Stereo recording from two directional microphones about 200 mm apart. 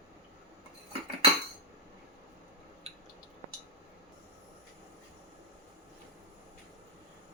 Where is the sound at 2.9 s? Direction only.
30° right (ahead or behind).